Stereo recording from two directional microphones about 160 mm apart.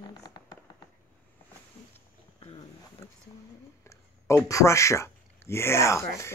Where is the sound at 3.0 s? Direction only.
15° left (ahead or behind).